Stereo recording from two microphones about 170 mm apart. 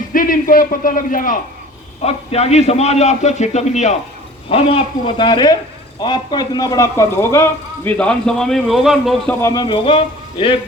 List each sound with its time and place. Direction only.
0.1 s a man's voice: 55° left (ahead or behind)
2.0 s a man's voice: 40° left (ahead or behind); by 9.3 s centre (ahead or behind)
9.4 s a man's voice: 20° left (ahead or behind)